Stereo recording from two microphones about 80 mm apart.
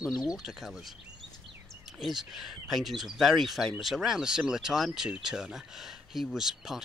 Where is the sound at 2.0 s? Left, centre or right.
Centre.